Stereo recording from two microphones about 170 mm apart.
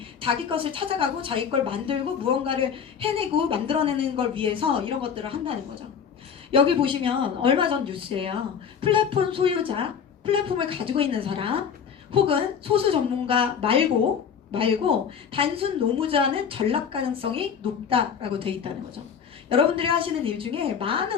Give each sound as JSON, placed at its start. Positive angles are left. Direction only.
{"t": 0.2, "sound": "a woman's voice", "side_deg": -30}